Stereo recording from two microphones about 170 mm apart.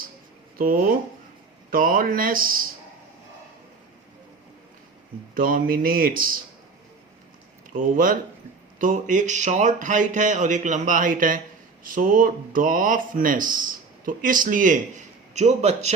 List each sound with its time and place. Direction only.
0.6 s speech: 55° right (ahead or behind)
5.3 s speech: 55° right (ahead or behind)
7.7 s speech: 50° right (ahead or behind)